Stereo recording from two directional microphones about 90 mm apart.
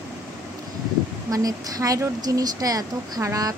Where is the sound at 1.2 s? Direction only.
40° right (ahead or behind).